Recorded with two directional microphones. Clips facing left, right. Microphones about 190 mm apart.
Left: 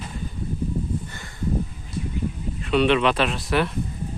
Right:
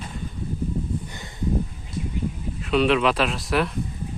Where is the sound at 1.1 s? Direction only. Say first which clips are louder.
Right 1 dB; 20° right (ahead or behind).